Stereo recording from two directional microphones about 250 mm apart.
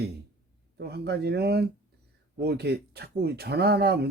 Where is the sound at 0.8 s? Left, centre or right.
Right.